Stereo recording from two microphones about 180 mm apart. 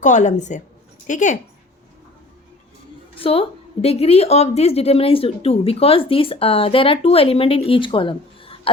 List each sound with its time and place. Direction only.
0.0 s a woman's voice: 40° left (ahead or behind)
3.2 s a woman's voice: 30° left (ahead or behind)